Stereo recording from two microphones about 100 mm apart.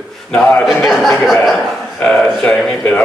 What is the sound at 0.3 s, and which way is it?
Speech, 15° left (ahead or behind).